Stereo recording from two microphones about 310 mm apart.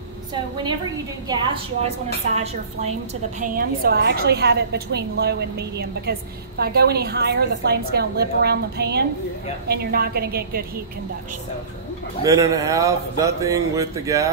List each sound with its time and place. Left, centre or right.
1.3 s a man's voice: centre
12.3 s a man's voice: centre